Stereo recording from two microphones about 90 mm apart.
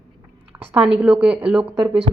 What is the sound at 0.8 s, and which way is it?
A woman's voice, 15° right (ahead or behind).